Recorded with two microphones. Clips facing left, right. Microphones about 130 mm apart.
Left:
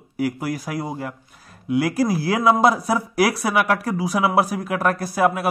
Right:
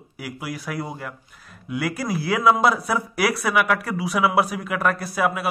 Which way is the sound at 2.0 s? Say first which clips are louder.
Right 1 dB; 35° left (ahead or behind).